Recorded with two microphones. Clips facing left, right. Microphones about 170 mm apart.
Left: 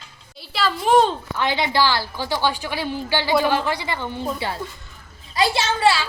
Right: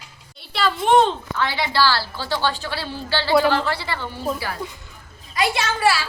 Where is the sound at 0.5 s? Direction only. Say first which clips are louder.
Even; centre (ahead or behind).